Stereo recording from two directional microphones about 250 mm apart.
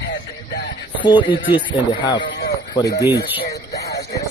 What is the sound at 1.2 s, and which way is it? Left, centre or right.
Speech, centre.